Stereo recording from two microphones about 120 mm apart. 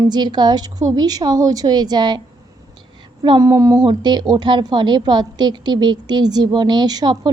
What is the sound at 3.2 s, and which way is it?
A woman's voice, 35° right (ahead or behind).